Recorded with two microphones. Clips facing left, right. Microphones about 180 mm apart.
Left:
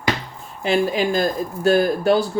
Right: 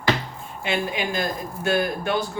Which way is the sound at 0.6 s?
35° left (ahead or behind).